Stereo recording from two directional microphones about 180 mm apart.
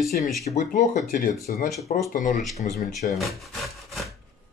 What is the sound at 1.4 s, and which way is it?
Speech, 55° left (ahead or behind).